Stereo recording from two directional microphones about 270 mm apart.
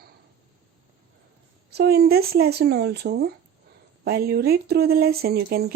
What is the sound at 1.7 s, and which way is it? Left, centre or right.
Speech, right.